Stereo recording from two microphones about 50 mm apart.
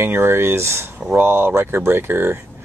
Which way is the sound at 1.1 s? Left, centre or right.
Right.